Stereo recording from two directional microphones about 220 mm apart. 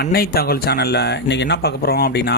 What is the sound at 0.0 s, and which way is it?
Speech, 45° left (ahead or behind).